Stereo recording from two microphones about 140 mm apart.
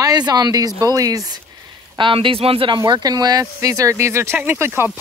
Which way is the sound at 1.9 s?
35° right (ahead or behind).